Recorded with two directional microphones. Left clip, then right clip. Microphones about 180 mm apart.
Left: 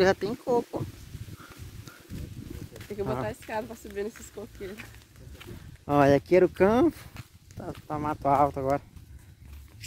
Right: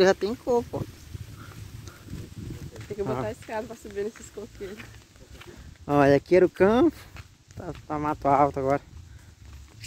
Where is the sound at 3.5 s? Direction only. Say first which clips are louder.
Right 1 dB; 50° left (ahead or behind).